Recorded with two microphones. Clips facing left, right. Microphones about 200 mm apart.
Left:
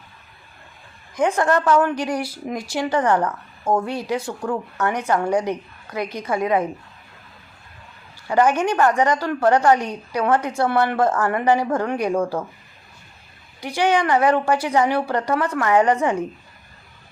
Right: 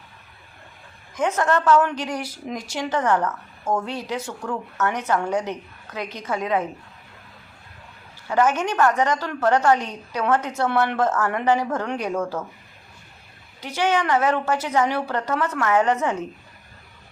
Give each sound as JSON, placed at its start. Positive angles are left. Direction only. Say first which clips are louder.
{"t": 1.1, "sound": "a woman's voice", "louder": "left 3 dB", "side_deg": 10}
{"t": 3.6, "sound": "speech", "louder": "left 4 dB", "side_deg": 35}
{"t": 3.8, "sound": "a woman's voice", "louder": "left 4 dB", "side_deg": 10}
{"t": 8.3, "sound": "a woman's voice", "louder": "left 3 dB", "side_deg": 10}
{"t": 13.6, "sound": "a woman's voice", "louder": "left 3 dB", "side_deg": 10}